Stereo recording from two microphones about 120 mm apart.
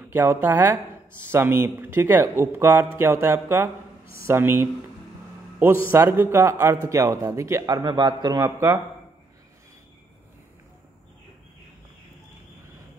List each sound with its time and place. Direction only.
0.1 s a woman's voice: 15° right (ahead or behind)
5.9 s speech: 20° right (ahead or behind); by 8.5 s 35° right (ahead or behind)
8.5 s speech: 25° right (ahead or behind)